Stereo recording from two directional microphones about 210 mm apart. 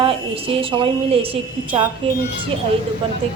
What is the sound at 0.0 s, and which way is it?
A woman's voice, 25° right (ahead or behind).